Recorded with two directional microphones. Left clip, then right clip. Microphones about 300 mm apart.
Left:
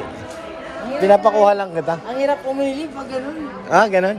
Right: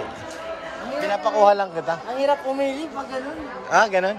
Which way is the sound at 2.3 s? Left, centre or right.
Right.